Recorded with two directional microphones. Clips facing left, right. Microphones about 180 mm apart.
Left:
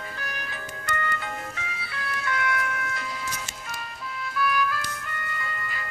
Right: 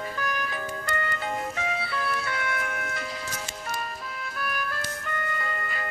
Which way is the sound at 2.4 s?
45° right (ahead or behind).